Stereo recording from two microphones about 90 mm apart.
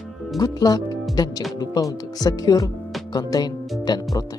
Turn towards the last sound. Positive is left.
turn(degrees=50)  # may be behind; listen again after turning